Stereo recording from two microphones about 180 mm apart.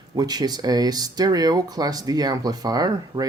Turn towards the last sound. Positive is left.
turn(degrees=-20)  # may be behind; listen again after turning